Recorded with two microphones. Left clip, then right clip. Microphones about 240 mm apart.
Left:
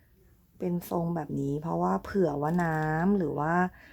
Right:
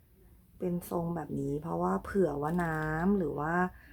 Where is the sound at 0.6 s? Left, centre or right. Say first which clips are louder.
Left 3 dB; left.